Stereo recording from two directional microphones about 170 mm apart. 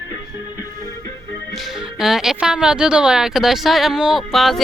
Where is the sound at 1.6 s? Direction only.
Centre (ahead or behind).